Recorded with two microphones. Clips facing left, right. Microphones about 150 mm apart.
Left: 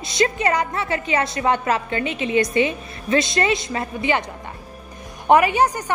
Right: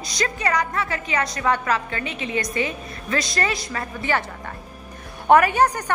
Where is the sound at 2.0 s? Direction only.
35° right (ahead or behind).